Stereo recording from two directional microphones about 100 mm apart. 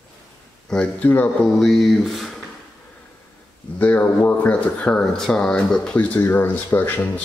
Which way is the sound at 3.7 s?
15° left (ahead or behind).